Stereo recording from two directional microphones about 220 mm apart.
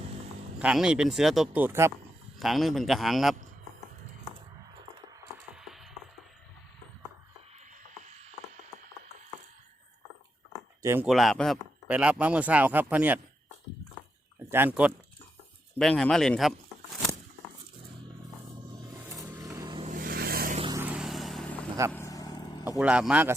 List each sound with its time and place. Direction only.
0.6 s a man's voice: 5° right (ahead or behind)
5.5 s music: centre (ahead or behind)
7.9 s frog: 35° right (ahead or behind)
10.8 s speech: 10° right (ahead or behind)
11.1 s speech: centre (ahead or behind)
14.5 s speech: 10° right (ahead or behind)
18.7 s vehicle: 20° right (ahead or behind)
19.8 s vehicle: 40° right (ahead or behind)
20.6 s vehicle: 20° right (ahead or behind)
20.8 s vehicle: 5° right (ahead or behind)
21.9 s vehicle: 15° left (ahead or behind)
22.8 s speech: 5° right (ahead or behind)